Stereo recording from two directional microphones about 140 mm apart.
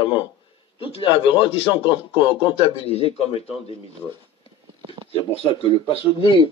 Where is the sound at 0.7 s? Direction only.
40° left (ahead or behind).